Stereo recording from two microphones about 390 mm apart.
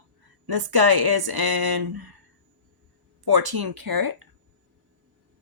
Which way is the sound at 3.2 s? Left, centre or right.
Right.